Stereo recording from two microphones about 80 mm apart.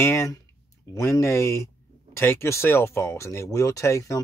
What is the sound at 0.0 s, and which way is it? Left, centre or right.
Speech, left.